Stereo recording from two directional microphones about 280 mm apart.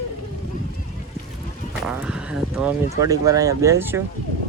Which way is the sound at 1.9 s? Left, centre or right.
Centre.